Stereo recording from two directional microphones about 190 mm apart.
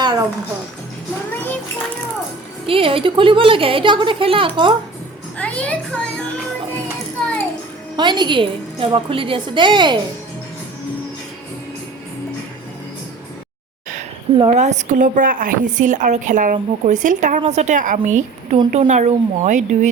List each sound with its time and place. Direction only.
0.0 s music: 20° right (ahead or behind)
2.6 s a woman's voice: 30° right (ahead or behind)
5.4 s a child's voice: 5° left (ahead or behind)
7.9 s a woman's voice: 25° right (ahead or behind)
14.3 s a woman's voice: 35° right (ahead or behind)